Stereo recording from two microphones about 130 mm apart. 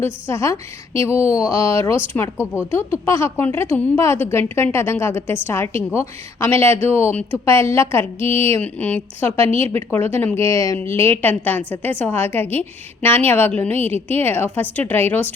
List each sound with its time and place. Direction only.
0.0 s a woman's voice: 20° left (ahead or behind)